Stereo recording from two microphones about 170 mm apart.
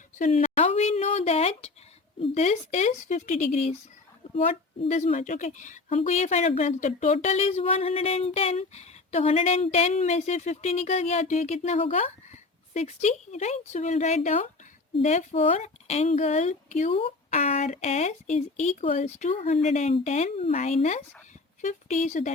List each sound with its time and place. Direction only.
0.2 s speech: 45° left (ahead or behind)
4.8 s speech: 40° left (ahead or behind)